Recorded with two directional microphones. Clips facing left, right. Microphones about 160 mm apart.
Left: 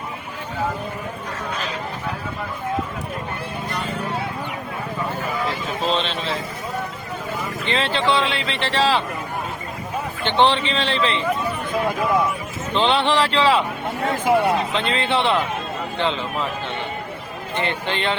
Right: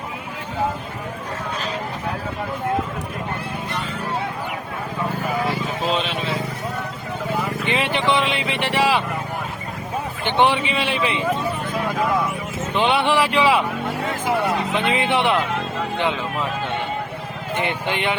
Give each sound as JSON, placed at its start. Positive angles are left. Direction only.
{"t": 5.9, "sound": "a sound", "side_deg": -10}
{"t": 7.6, "sound": "speech", "side_deg": -15}
{"t": 10.2, "sound": "speech", "side_deg": -10}
{"t": 12.7, "sound": "speech", "side_deg": -10}
{"t": 14.3, "sound": "speech", "side_deg": 20}
{"t": 14.8, "sound": "speech", "side_deg": -15}
{"t": 17.6, "sound": "speech", "side_deg": -15}